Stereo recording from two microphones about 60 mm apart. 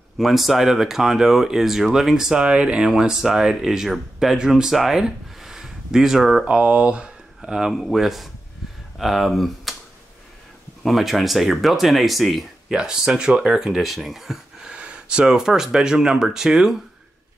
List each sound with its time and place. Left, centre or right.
0.2 s speech: centre
6.4 s speech: right
7.5 s speech: centre
10.8 s speech: centre